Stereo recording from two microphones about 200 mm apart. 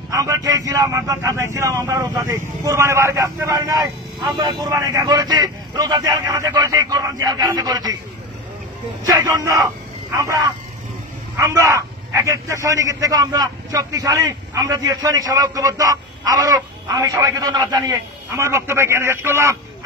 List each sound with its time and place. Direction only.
0.1 s a man's voice: 15° right (ahead or behind)
9.0 s a man's voice: 15° right (ahead or behind)